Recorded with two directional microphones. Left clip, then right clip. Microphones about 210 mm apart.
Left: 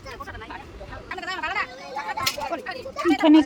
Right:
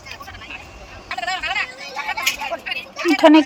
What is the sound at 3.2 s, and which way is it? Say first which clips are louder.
Speech: right 6 dB; 10° right (ahead or behind).